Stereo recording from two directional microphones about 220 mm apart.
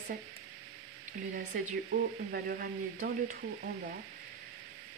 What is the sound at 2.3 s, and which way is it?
Speech, 40° right (ahead or behind).